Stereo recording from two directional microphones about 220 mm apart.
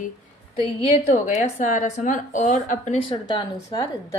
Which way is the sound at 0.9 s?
35° left (ahead or behind).